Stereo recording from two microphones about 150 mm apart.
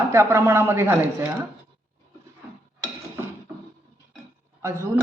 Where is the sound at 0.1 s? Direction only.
15° right (ahead or behind).